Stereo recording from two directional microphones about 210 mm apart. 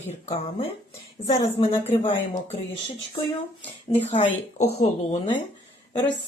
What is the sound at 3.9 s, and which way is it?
A woman's voice, 30° left (ahead or behind).